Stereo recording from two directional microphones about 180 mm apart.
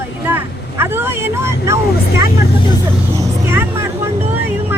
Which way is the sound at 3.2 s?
15° right (ahead or behind).